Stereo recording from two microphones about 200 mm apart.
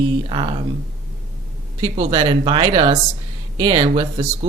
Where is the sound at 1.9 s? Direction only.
25° right (ahead or behind).